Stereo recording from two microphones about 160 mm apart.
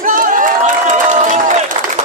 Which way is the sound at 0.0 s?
60° right (ahead or behind).